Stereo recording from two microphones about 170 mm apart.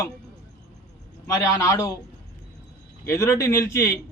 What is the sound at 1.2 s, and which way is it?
Speech, 20° left (ahead or behind).